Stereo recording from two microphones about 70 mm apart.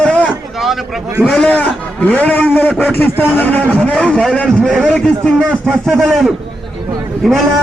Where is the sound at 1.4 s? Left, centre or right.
Left.